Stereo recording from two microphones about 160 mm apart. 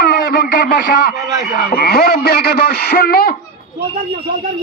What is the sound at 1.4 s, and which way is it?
Speech, 80° left.